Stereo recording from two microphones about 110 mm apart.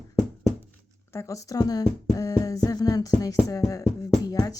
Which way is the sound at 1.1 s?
25° left (ahead or behind).